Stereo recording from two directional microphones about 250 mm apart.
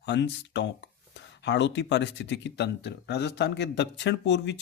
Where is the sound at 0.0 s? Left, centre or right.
Left.